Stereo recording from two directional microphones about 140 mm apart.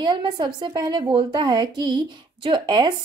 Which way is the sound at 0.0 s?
30° right (ahead or behind).